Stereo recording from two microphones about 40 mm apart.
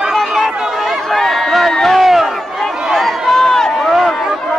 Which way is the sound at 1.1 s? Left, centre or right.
Centre.